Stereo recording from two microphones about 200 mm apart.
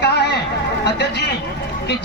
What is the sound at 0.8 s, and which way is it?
Speech, 60° left (ahead or behind).